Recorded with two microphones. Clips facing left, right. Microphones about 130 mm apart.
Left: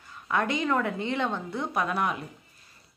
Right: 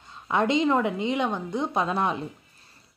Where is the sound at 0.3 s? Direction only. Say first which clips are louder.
Right 4 dB; 20° right (ahead or behind).